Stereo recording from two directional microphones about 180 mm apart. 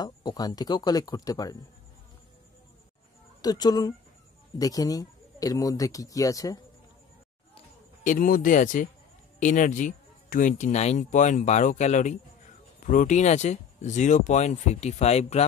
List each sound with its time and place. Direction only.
0.0 s speech: 20° left (ahead or behind)
3.4 s speech: 20° left (ahead or behind)
8.0 s speech: 45° left (ahead or behind)